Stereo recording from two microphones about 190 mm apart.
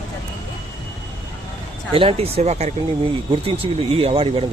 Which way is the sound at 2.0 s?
30° right (ahead or behind).